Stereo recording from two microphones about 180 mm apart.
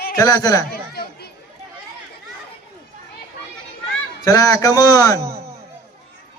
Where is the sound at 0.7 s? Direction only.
60° left (ahead or behind).